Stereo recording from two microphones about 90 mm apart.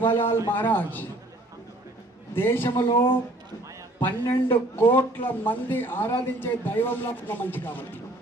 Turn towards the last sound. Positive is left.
turn(degrees=20)  # may be behind; listen again after turning